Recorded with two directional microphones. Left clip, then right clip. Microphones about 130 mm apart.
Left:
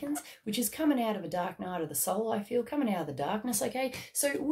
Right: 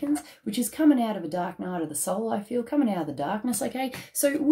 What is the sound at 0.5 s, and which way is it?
A woman's voice, 15° left (ahead or behind).